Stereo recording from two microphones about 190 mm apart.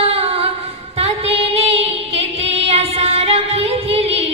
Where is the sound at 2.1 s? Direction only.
30° right (ahead or behind).